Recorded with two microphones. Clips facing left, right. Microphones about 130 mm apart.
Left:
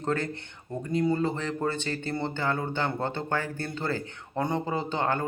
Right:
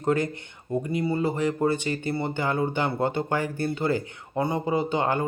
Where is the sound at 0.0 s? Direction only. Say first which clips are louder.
Right 5 dB; 15° right (ahead or behind).